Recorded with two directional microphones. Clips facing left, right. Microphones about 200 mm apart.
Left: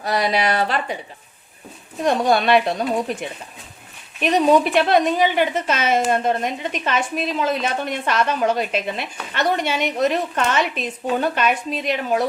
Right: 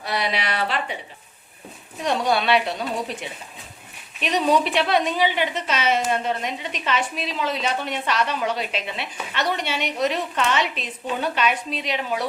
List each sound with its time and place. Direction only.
0.0 s a woman's voice: 45° left (ahead or behind)
2.0 s a woman's voice: 45° left (ahead or behind)